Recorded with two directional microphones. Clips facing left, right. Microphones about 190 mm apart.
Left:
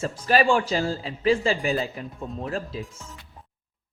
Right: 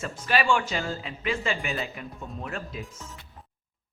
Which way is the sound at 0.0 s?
35° left (ahead or behind).